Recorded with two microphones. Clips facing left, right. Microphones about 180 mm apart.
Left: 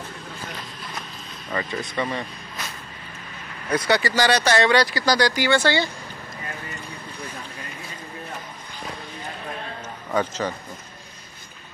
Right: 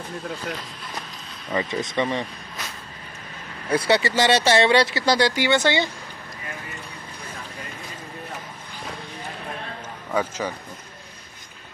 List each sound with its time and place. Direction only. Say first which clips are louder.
1.5 s speech: right 3 dB; 20° right (ahead or behind)
3.6 s speech: right 1 dB; 30° right (ahead or behind)
10.1 s a man's voice: left 1 dB; 10° right (ahead or behind)